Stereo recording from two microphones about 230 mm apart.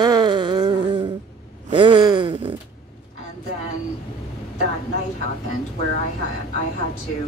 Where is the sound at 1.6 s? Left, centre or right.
Right.